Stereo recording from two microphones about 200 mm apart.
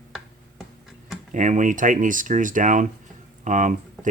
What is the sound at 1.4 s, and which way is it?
Speech, 40° right (ahead or behind).